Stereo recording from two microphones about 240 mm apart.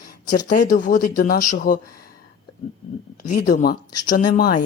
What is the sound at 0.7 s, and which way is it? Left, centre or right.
Speech, left.